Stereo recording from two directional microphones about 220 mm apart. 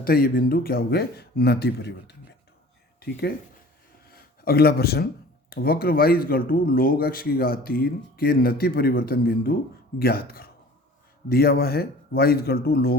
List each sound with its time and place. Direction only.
0.0 s speech: 40° left (ahead or behind)
4.1 s a sound: 45° left (ahead or behind)
5.5 s speech: 45° left (ahead or behind)